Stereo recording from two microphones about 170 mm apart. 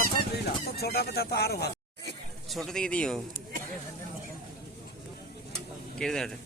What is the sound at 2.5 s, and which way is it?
Speech, centre (ahead or behind).